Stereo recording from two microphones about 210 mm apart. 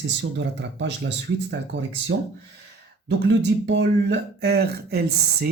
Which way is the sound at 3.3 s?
55° right (ahead or behind).